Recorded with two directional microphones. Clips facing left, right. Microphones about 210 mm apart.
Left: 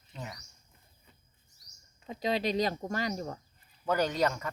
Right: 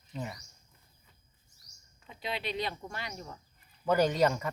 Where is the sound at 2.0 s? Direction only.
40° left (ahead or behind).